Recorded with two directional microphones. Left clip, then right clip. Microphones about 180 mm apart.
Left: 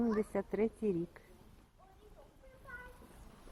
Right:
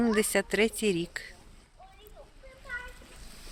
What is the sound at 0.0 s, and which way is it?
Speech, 20° right (ahead or behind).